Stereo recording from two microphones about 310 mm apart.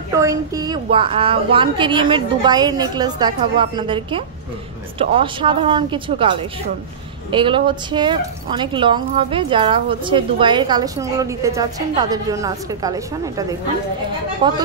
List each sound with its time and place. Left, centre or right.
0.2 s a woman's voice: centre